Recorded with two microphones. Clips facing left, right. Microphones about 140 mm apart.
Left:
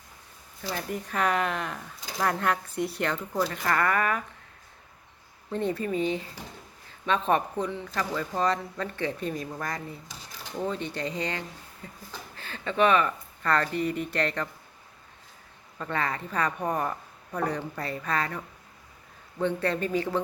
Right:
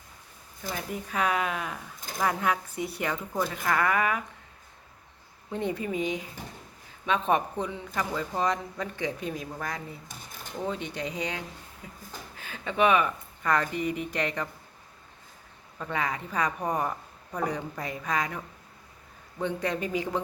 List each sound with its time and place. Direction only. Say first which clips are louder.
0.7 s speech: left 2 dB; centre (ahead or behind)
5.5 s speech: left 2 dB; 15° right (ahead or behind)
10.1 s a sound: even; 50° right (ahead or behind)
10.7 s speech: even; 10° right (ahead or behind)
15.8 s speech: left 1 dB; 10° right (ahead or behind)